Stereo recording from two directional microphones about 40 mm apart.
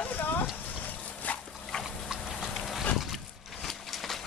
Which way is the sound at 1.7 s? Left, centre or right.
Centre.